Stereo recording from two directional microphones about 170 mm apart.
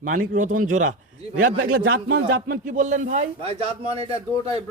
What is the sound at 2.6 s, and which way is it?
A man's voice, 45° right (ahead or behind).